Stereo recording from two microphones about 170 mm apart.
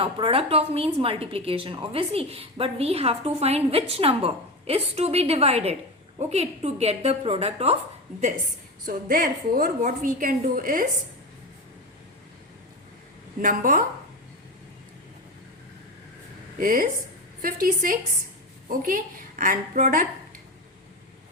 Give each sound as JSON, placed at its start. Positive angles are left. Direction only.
{"t": 0.0, "sound": "a woman's voice", "side_deg": -35}
{"t": 8.9, "sound": "a woman's voice", "side_deg": -55}
{"t": 13.4, "sound": "a woman's voice", "side_deg": -50}
{"t": 16.6, "sound": "a woman's voice", "side_deg": -55}